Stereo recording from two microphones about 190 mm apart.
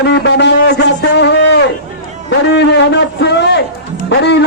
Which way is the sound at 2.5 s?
65° left (ahead or behind).